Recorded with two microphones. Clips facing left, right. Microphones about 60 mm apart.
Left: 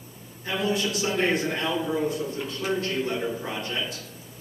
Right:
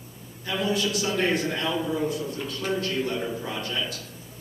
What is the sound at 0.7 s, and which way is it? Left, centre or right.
A man's voice, left.